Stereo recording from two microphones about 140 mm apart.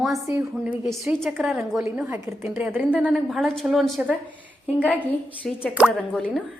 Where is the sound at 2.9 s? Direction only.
5° right (ahead or behind).